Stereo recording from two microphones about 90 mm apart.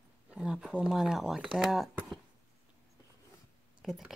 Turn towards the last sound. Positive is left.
turn(degrees=0)  # may be behind; listen again after turning